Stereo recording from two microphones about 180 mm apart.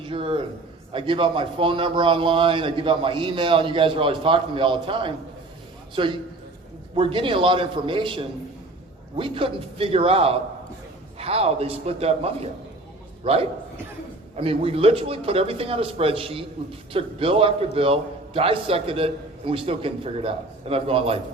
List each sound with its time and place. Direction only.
0.0 s a man's voice: 30° right (ahead or behind)